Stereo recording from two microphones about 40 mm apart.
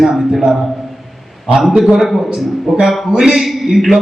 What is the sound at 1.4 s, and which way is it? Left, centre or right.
A man's voice, centre.